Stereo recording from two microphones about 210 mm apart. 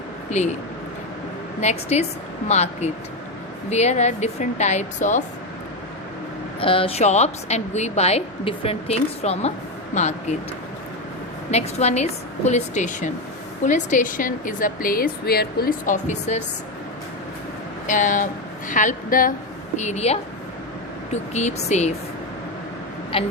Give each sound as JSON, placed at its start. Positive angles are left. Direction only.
{"t": 0.3, "sound": "speech", "side_deg": 35}
{"t": 1.6, "sound": "a woman's voice", "side_deg": 30}
{"t": 6.6, "sound": "a woman's voice", "side_deg": 25}
{"t": 11.5, "sound": "a woman's voice", "side_deg": 30}
{"t": 17.8, "sound": "a woman's voice", "side_deg": 35}
{"t": 23.1, "sound": "a woman's voice", "side_deg": 25}